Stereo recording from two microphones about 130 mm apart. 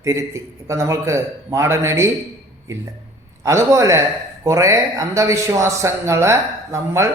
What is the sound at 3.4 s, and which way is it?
A man's voice, 25° right (ahead or behind).